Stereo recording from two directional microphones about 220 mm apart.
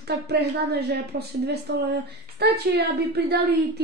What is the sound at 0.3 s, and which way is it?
A woman's voice, 50° right (ahead or behind).